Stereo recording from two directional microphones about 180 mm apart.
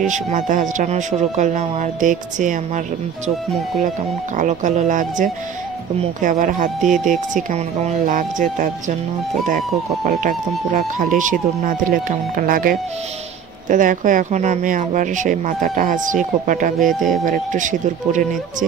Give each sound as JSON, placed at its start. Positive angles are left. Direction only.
{"t": 0.0, "sound": "speech", "side_deg": -40}
{"t": 4.4, "sound": "speech", "side_deg": -40}